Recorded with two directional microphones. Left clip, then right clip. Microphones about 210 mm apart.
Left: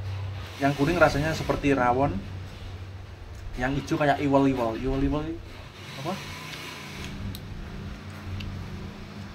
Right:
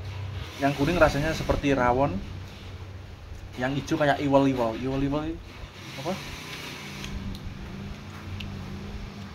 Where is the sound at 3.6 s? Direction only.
5° right (ahead or behind).